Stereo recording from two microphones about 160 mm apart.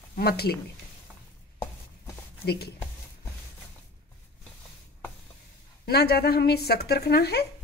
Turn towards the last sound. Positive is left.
turn(degrees=90)